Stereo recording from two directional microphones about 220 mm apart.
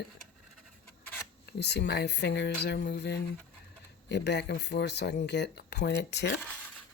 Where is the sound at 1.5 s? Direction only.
50° left (ahead or behind).